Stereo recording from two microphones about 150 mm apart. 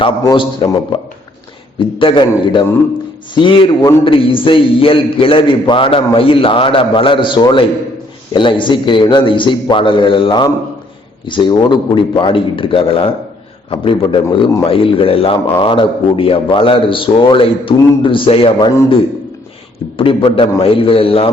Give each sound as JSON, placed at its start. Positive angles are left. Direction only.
{"t": 0.0, "sound": "a man's voice", "side_deg": 35}
{"t": 1.8, "sound": "a man's voice", "side_deg": 35}
{"t": 20.0, "sound": "a man's voice", "side_deg": 35}